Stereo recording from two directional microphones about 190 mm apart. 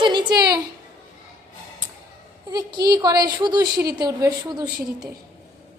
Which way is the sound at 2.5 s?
20° right (ahead or behind).